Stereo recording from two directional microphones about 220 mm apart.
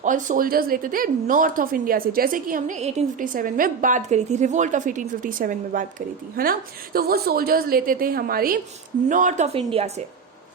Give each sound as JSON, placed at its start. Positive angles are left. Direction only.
{"t": 0.0, "sound": "a woman's voice", "side_deg": -35}